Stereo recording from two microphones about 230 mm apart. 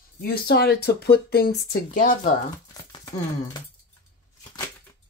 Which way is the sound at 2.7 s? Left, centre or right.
Centre.